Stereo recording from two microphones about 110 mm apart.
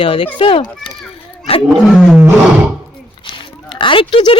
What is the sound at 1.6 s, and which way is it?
Roaring cats, centre (ahead or behind).